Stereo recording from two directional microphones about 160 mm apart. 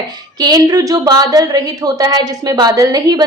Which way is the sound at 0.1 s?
25° right (ahead or behind).